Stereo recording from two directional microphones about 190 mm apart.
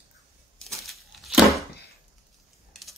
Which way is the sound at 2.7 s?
Centre (ahead or behind).